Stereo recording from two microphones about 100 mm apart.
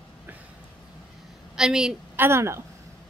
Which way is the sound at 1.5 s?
5° right (ahead or behind).